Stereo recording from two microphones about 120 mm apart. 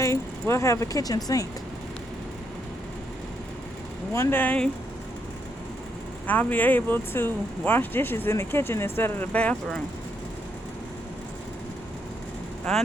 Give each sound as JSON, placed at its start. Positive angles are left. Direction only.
{"t": 0.0, "sound": "speech", "side_deg": 25}
{"t": 4.1, "sound": "speech", "side_deg": 20}
{"t": 6.2, "sound": "speech", "side_deg": 15}
{"t": 12.7, "sound": "speech", "side_deg": 5}